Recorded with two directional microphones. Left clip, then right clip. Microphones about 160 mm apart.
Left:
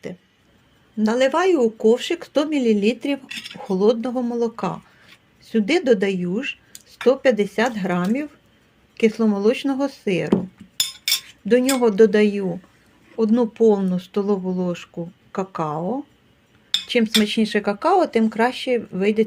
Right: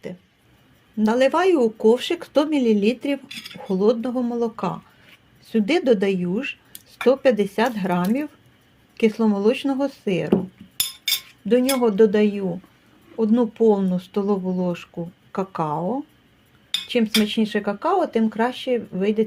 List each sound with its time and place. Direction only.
0.9 s speech: centre (ahead or behind)
11.4 s speech: 20° left (ahead or behind); by 16.0 s 5° left (ahead or behind)
16.8 s speech: 15° left (ahead or behind)